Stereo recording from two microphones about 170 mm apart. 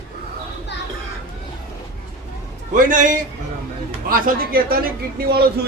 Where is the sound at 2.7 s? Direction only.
50° right (ahead or behind).